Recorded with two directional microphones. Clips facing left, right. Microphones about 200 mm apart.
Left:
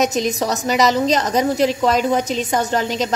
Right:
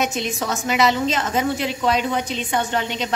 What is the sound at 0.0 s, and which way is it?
A woman's voice, 40° left (ahead or behind).